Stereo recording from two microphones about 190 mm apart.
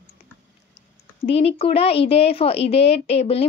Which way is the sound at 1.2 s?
30° left (ahead or behind).